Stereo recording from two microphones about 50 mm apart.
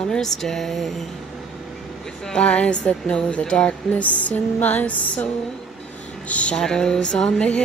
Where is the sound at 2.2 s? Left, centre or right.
Centre.